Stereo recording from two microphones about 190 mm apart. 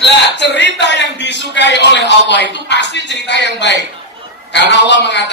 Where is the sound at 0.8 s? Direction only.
65° left (ahead or behind).